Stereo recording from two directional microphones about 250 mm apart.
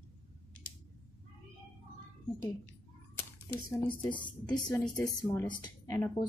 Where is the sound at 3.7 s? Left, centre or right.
Centre.